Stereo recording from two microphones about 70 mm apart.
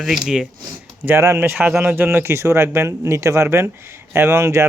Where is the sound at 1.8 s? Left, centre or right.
Right.